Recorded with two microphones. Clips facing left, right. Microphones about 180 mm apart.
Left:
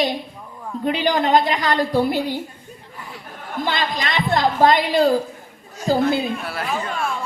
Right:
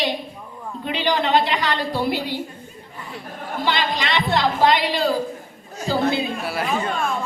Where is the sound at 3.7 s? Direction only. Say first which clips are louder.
Right 2 dB; 45° left (ahead or behind).